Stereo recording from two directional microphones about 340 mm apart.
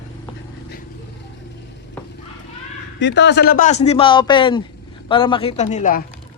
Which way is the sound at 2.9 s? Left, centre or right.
Left.